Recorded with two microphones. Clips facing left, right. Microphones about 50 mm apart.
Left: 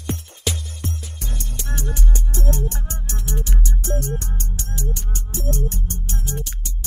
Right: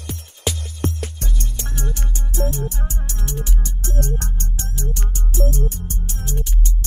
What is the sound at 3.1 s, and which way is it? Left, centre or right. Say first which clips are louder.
Music: left 1 dB; left.